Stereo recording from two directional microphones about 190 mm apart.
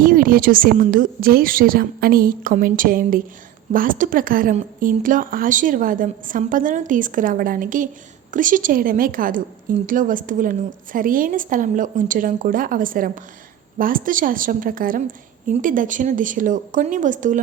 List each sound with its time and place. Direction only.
0.0 s a woman's voice: 45° right (ahead or behind)